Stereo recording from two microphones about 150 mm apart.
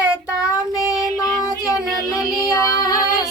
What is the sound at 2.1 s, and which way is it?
Female singing, 25° left (ahead or behind).